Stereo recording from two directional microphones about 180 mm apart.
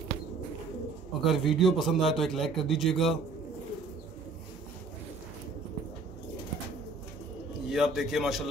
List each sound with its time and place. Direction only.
1.2 s speech: centre (ahead or behind)
7.7 s speech: centre (ahead or behind)